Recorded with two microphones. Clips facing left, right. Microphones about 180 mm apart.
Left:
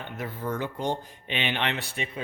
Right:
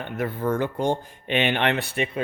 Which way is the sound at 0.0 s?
60° right (ahead or behind).